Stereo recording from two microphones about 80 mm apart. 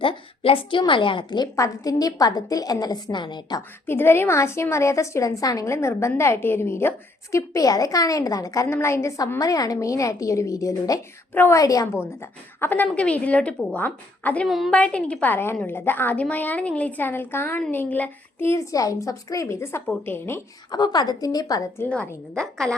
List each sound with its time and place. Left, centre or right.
0.7 s a woman's voice: left
1.5 s a woman's voice: left
3.8 s a woman's voice: left
12.5 s a woman's voice: left
12.9 s a woman's voice: centre
14.4 s a woman's voice: centre
14.7 s a woman's voice: centre
18.4 s a woman's voice: left
20.7 s a woman's voice: left
21.8 s a woman's voice: centre